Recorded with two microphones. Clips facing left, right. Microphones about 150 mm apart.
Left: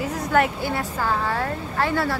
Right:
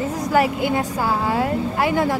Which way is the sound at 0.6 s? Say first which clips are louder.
Right 4 dB; 15° right (ahead or behind).